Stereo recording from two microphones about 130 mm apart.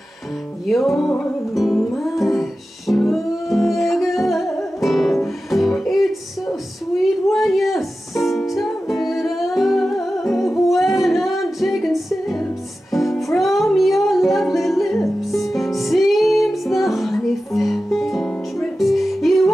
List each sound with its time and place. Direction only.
0.7 s music: centre (ahead or behind)